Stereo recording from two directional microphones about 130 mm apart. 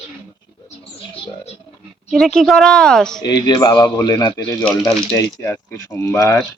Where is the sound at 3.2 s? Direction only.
30° left (ahead or behind).